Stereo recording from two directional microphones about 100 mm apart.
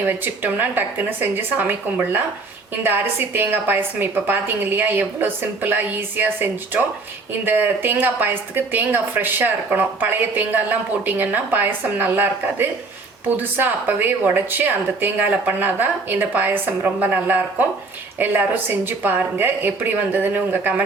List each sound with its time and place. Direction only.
0.0 s a woman's voice: 20° right (ahead or behind)